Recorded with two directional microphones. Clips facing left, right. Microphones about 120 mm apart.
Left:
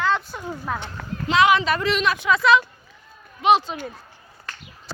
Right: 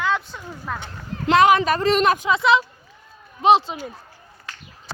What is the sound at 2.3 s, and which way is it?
Speech, 25° right (ahead or behind).